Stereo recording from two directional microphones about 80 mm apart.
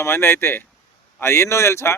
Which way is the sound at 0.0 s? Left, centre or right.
Left.